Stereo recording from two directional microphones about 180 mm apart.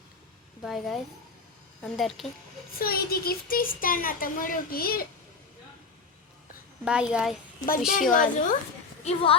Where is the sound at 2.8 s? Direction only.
55° left (ahead or behind).